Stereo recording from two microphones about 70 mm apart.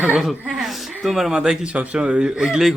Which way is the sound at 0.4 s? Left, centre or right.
Centre.